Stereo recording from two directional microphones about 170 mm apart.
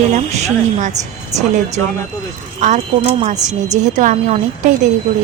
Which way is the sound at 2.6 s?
40° right (ahead or behind).